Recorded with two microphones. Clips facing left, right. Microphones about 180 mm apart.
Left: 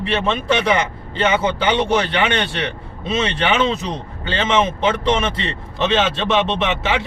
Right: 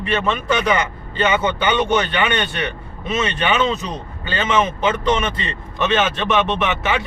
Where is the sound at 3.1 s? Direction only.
25° left (ahead or behind).